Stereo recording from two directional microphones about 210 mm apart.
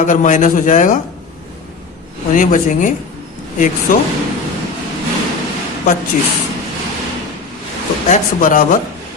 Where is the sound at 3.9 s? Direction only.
40° left (ahead or behind).